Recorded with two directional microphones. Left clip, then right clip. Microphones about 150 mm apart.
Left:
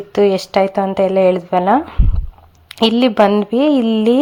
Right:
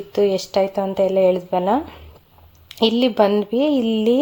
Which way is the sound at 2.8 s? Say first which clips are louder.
Left 4 dB; 15° left (ahead or behind).